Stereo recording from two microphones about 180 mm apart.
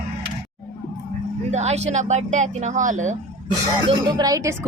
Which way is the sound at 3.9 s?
20° right (ahead or behind).